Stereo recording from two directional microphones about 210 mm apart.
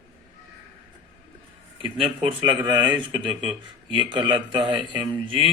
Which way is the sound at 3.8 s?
20° right (ahead or behind).